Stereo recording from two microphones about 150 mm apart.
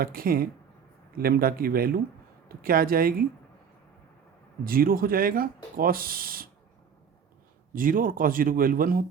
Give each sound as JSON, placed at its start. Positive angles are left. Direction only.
{"t": 0.0, "sound": "speech", "side_deg": -75}
{"t": 1.1, "sound": "speech", "side_deg": -85}
{"t": 4.6, "sound": "speech", "side_deg": -75}
{"t": 7.7, "sound": "speech", "side_deg": -65}